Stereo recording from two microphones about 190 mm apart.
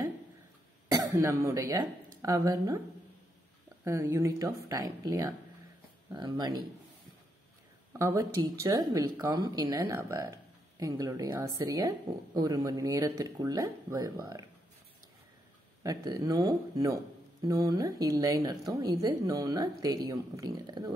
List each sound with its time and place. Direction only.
0.8 s speech: 15° right (ahead or behind)
3.8 s speech: 15° right (ahead or behind)
8.0 s speech: 15° right (ahead or behind)
15.8 s speech: 20° right (ahead or behind)